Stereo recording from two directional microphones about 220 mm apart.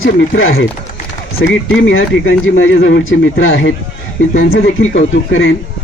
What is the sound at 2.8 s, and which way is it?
Speech, 55° left (ahead or behind).